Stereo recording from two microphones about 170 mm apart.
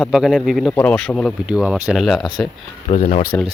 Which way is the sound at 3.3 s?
15° left (ahead or behind).